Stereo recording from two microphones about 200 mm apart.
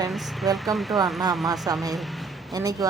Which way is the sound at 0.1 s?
Centre (ahead or behind).